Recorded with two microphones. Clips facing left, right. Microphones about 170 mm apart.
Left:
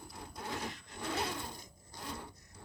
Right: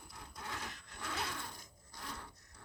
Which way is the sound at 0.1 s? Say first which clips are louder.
Left 5 dB; 30° left (ahead or behind).